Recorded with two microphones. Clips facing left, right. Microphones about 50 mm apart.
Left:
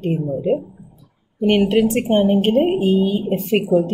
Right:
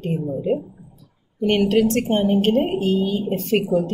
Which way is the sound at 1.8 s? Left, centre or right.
Centre.